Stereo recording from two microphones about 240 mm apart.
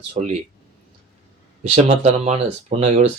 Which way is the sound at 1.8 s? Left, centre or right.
Right.